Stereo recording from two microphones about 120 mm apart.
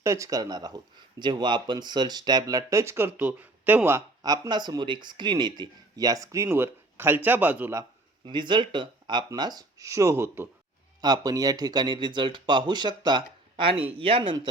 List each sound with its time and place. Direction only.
0.0 s speech: 25° right (ahead or behind)
4.2 s speech: 35° right (ahead or behind)
8.2 s speech: 40° right (ahead or behind); by 10.5 s 20° right (ahead or behind)
11.0 s speech: 35° right (ahead or behind)
14.0 s chopping: 45° right (ahead or behind)